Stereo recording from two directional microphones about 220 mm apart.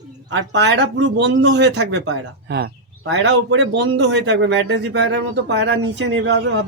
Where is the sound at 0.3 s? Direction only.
55° right (ahead or behind).